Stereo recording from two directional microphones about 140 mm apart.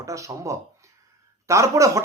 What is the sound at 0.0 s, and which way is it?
Speech, 20° right (ahead or behind).